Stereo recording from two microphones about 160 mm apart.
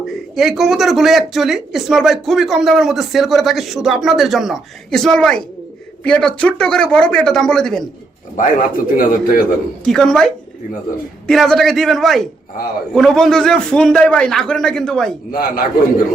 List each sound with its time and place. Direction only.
0.0 s speech: centre (ahead or behind)
8.4 s a man's voice: 60° left (ahead or behind)
9.8 s speech: centre (ahead or behind)
15.3 s a man's voice: 65° left (ahead or behind)